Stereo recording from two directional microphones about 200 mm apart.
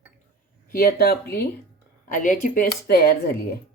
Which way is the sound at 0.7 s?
50° left (ahead or behind).